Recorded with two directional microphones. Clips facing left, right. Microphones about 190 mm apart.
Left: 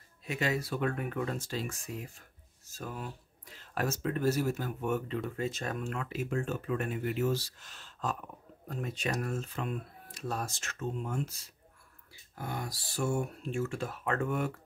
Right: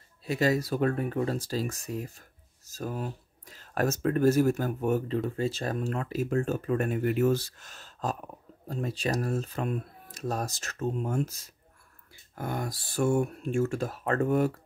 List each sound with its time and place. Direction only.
0.2 s speech: 35° right (ahead or behind)